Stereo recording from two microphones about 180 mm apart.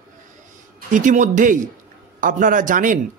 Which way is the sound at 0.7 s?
45° right (ahead or behind).